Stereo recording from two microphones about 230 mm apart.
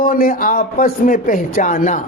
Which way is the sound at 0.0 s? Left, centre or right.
Left.